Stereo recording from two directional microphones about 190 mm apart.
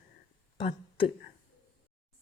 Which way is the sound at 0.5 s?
25° left (ahead or behind).